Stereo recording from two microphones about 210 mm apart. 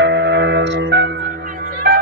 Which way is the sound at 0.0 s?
55° right (ahead or behind).